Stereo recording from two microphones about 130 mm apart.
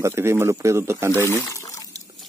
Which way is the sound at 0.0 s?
20° right (ahead or behind).